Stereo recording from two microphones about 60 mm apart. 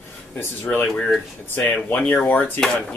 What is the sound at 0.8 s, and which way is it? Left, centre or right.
Speech, centre.